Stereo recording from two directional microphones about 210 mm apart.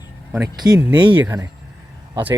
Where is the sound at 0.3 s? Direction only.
10° right (ahead or behind).